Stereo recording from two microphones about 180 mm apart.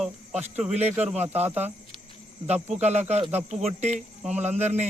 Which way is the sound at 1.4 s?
10° right (ahead or behind).